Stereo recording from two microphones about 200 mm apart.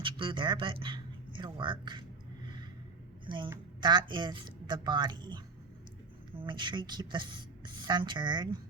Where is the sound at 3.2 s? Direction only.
25° right (ahead or behind).